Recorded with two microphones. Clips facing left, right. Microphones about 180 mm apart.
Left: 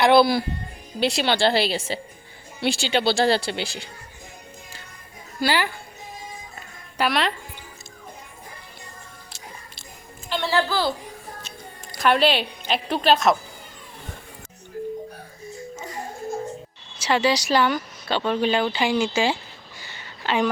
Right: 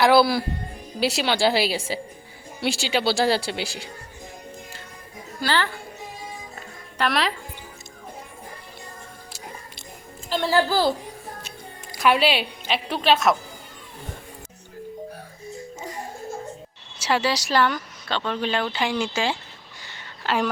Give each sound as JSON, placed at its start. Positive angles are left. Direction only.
{"t": 0.0, "sound": "a woman's voice", "side_deg": -5}
{"t": 5.4, "sound": "a woman's voice", "side_deg": 10}
{"t": 7.0, "sound": "speech", "side_deg": 0}
{"t": 10.2, "sound": "a woman's voice", "side_deg": -40}
{"t": 11.9, "sound": "speech", "side_deg": -10}
{"t": 17.0, "sound": "speech", "side_deg": -5}
{"t": 19.8, "sound": "a sound", "side_deg": 0}